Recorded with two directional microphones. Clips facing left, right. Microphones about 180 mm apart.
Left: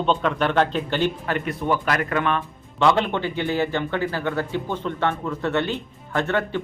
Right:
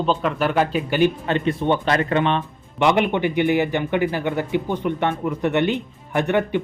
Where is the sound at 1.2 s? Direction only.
25° right (ahead or behind).